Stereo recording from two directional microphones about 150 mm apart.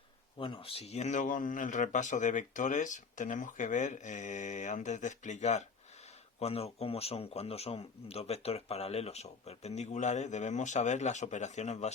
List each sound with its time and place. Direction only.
0.3 s speech: 35° left (ahead or behind)